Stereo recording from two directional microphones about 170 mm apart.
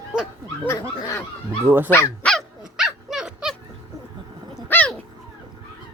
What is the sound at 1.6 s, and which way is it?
Speech, 10° right (ahead or behind).